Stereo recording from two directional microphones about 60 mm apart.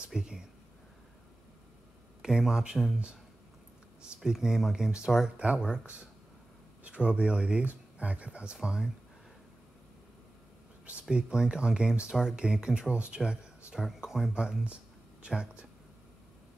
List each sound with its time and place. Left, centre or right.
0.0 s speech: centre
2.2 s speech: centre
4.0 s speech: centre
6.8 s speech: centre
10.9 s speech: centre